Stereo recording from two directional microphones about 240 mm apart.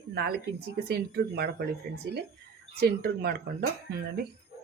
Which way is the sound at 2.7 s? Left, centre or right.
Right.